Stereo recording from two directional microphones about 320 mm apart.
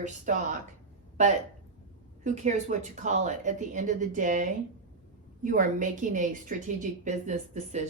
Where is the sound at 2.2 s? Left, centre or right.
Right.